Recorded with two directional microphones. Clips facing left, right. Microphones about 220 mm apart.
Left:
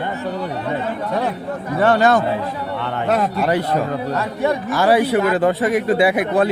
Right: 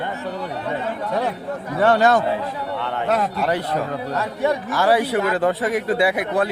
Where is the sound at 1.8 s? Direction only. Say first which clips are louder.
Left 1 dB; 60° left (ahead or behind).